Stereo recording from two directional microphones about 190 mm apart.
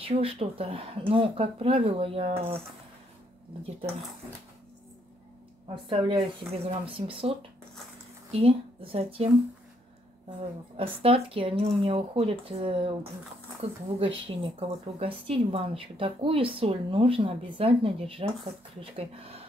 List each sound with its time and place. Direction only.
0.0 s speech: 30° right (ahead or behind)
5.9 s speech: 25° right (ahead or behind)
10.8 s speech: 30° right (ahead or behind)